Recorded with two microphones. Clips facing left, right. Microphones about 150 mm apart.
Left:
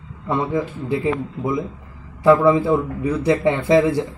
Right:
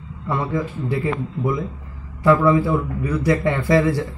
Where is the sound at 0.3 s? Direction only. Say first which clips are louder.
Left 2 dB; 20° left (ahead or behind).